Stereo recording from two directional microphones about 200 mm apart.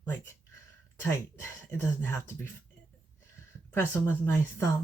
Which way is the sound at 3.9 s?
10° left (ahead or behind).